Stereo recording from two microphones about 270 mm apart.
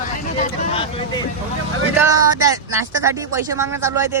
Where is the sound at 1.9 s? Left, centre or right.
Centre.